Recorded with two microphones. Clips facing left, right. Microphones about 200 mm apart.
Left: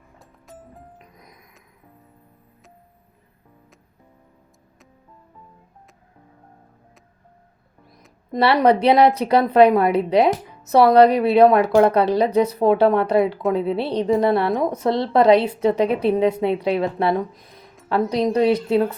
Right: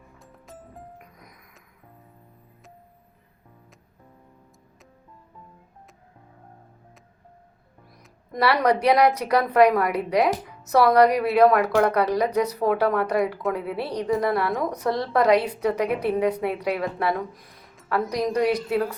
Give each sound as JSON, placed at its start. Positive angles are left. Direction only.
{"t": 0.2, "sound": "music", "side_deg": 0}
{"t": 1.2, "sound": "music", "side_deg": 20}
{"t": 8.3, "sound": "a woman's voice", "side_deg": 25}